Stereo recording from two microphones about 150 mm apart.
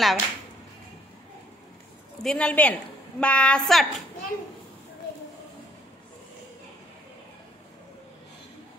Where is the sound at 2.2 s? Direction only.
5° left (ahead or behind).